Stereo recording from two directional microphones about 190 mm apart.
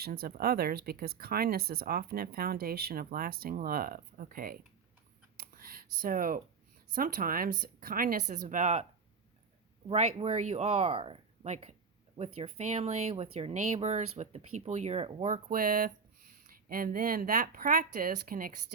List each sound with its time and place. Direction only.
0.0 s speech: 50° right (ahead or behind)
5.4 s a sound: 50° right (ahead or behind)
6.9 s speech: 50° right (ahead or behind)
9.9 s speech: 30° right (ahead or behind)
15.4 s speech: 45° right (ahead or behind)